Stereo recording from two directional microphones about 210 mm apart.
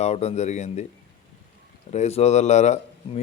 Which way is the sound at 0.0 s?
30° left (ahead or behind).